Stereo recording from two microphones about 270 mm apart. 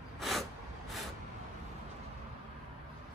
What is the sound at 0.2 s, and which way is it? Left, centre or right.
Snort, centre.